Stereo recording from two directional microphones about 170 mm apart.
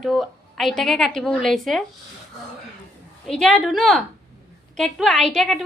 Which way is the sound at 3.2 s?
Centre (ahead or behind).